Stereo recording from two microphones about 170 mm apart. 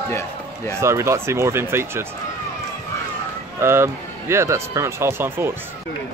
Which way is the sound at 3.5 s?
15° right (ahead or behind).